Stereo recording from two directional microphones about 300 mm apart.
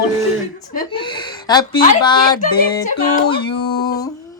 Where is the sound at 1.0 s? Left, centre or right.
Centre.